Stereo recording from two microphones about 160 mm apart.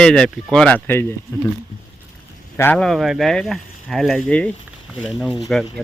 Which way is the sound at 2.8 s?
Centre (ahead or behind).